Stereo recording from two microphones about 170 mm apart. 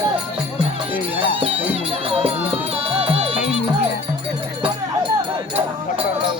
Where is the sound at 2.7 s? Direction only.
35° right (ahead or behind).